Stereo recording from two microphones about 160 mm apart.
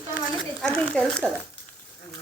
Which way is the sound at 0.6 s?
5° left (ahead or behind).